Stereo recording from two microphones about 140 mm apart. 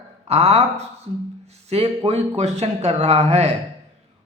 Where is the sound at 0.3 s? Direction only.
50° right (ahead or behind).